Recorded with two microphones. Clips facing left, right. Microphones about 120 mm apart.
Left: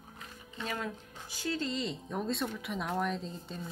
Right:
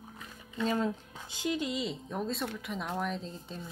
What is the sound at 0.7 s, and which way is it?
Speech, 25° right (ahead or behind).